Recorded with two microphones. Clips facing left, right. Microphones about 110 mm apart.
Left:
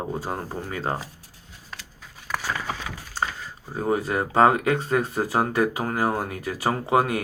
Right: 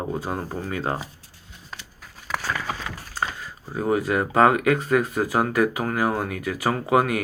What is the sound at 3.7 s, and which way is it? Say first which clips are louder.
Speech: right 2 dB; 30° left (ahead or behind).